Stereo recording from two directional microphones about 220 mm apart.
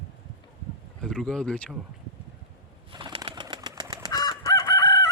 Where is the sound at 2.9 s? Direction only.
20° right (ahead or behind).